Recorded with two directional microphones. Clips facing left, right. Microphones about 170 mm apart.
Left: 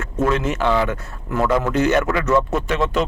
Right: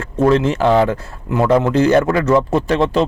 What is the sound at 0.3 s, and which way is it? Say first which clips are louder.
Speech: right 7 dB; 30° right (ahead or behind).